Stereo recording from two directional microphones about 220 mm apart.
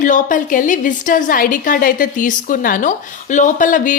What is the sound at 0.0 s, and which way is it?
A woman's voice, 35° left (ahead or behind).